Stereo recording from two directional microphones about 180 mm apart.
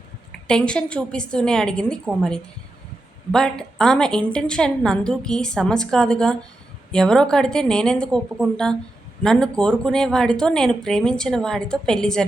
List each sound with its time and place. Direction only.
0.4 s a woman's voice: 5° left (ahead or behind)
3.3 s a woman's voice: 5° left (ahead or behind)